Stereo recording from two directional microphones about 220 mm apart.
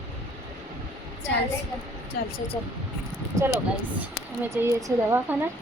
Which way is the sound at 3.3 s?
15° right (ahead or behind).